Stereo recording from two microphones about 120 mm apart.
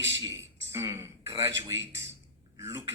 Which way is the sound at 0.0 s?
25° right (ahead or behind).